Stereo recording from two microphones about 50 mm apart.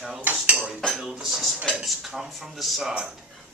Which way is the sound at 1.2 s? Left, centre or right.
Centre.